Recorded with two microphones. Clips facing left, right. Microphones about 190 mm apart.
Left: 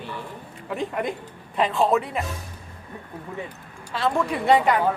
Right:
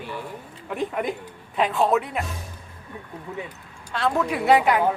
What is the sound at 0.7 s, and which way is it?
Speech, centre (ahead or behind).